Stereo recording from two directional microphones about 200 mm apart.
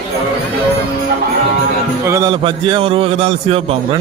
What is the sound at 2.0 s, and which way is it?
A man's voice, 15° right (ahead or behind).